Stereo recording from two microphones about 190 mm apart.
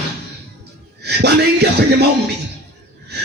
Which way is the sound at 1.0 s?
60° right (ahead or behind).